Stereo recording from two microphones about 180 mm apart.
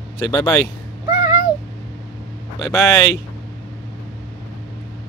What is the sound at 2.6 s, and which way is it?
Speech, 15° left (ahead or behind).